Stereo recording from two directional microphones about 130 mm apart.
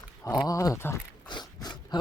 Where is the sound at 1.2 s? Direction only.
35° left (ahead or behind).